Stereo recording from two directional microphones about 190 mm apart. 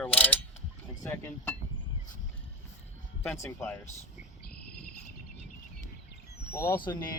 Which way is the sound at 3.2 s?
10° left (ahead or behind).